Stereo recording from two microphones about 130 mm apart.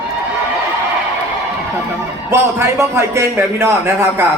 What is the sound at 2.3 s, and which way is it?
A man's voice, 20° right (ahead or behind).